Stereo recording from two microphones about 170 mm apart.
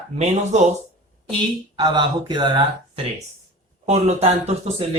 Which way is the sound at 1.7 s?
25° right (ahead or behind).